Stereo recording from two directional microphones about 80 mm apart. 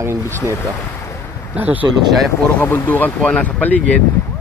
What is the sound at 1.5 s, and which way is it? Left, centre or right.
Speech, centre.